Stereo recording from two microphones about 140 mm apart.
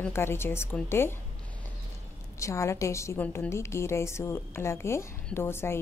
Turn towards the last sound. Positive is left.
turn(degrees=15)  # may be behind; listen again after turning